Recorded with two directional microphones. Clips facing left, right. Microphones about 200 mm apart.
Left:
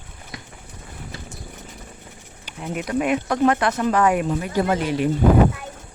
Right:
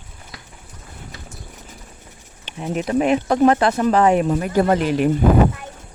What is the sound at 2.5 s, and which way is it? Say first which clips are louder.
Speech: right 4 dB; 25° right (ahead or behind).